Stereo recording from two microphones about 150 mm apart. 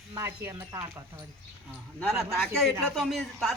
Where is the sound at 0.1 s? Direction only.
20° right (ahead or behind).